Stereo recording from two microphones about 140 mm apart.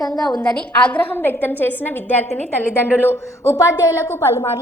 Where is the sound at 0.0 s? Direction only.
30° left (ahead or behind).